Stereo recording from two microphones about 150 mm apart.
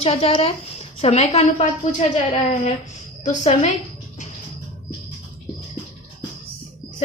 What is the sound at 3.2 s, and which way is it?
Speech, 50° left (ahead or behind).